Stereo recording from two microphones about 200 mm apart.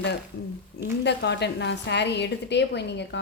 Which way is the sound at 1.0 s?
60° left (ahead or behind).